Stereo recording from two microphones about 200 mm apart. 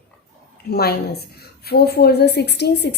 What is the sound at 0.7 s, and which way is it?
A woman's voice, 50° left (ahead or behind).